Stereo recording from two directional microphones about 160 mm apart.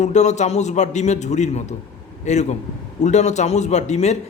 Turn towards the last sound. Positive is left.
turn(degrees=45)  # may be behind; listen again after turning